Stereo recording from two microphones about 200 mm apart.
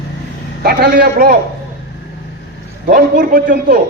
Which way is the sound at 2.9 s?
45° right (ahead or behind).